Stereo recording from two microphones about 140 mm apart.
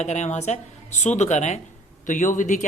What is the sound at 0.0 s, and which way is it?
A woman's voice, 55° left (ahead or behind).